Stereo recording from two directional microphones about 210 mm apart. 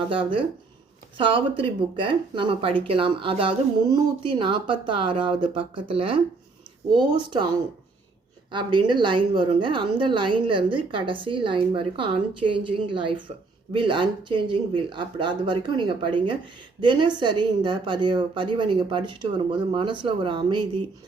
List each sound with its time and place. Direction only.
0.1 s speech: 25° right (ahead or behind)